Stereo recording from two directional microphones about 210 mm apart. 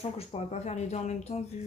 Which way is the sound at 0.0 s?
30° left (ahead or behind).